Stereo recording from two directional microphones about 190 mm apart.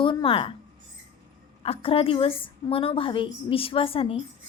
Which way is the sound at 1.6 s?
30° left (ahead or behind).